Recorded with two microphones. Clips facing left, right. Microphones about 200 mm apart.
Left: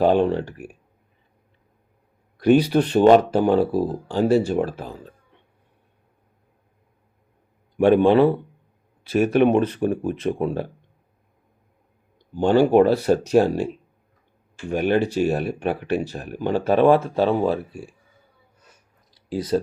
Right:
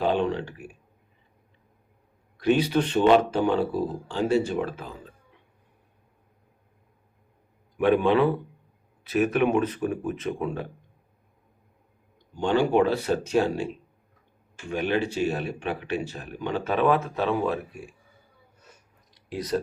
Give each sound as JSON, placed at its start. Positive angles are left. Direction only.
{"t": 0.0, "sound": "speech", "side_deg": 40}
{"t": 2.5, "sound": "speech", "side_deg": 40}
{"t": 7.8, "sound": "speech", "side_deg": 30}
{"t": 12.3, "sound": "speech", "side_deg": 40}
{"t": 14.7, "sound": "speech", "side_deg": 45}
{"t": 16.4, "sound": "speech", "side_deg": 35}
{"t": 19.3, "sound": "speech", "side_deg": 30}